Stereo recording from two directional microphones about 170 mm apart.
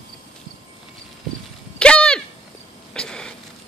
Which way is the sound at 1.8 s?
5° left (ahead or behind).